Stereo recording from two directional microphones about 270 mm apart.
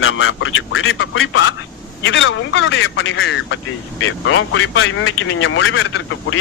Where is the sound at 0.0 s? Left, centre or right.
Left.